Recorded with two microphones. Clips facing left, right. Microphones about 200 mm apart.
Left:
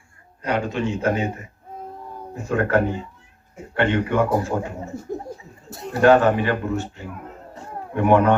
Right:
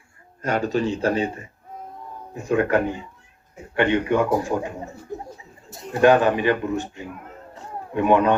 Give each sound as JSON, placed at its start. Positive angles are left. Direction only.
{"t": 0.4, "sound": "a man's voice", "side_deg": -40}
{"t": 2.3, "sound": "speech", "side_deg": -15}
{"t": 4.9, "sound": "chuckle", "side_deg": 45}
{"t": 6.0, "sound": "speech", "side_deg": -15}